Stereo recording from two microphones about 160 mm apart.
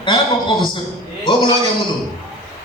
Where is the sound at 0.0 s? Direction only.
30° left (ahead or behind).